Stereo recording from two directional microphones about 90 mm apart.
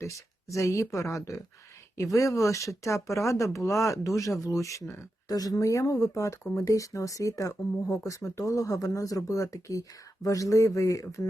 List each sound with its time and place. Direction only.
0.0 s speech: 35° left (ahead or behind)
5.3 s speech: 45° left (ahead or behind)